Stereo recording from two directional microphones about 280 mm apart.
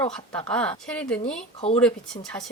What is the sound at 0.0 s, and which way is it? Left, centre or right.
A woman's voice, centre.